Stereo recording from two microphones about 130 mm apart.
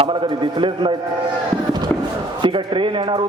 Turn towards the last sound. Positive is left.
turn(degrees=-40)  # may be behind; listen again after turning